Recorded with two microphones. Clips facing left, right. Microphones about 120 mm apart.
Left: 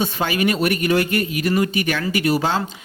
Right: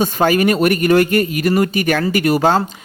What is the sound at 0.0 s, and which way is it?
A man's voice, 45° right (ahead or behind).